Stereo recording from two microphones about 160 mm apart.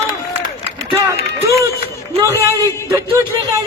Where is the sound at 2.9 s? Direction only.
20° right (ahead or behind).